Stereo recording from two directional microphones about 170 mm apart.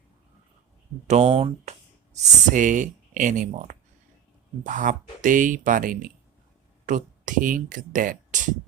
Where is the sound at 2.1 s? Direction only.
50° right (ahead or behind).